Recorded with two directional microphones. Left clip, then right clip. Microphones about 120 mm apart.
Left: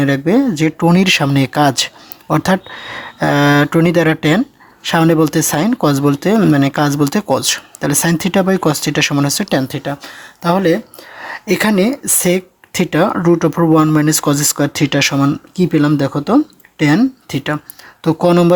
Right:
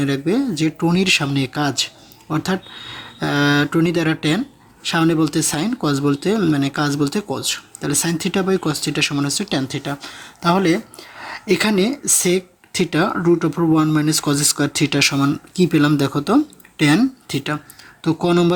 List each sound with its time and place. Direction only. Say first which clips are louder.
0.0 s speech: left 6 dB; 60° left (ahead or behind)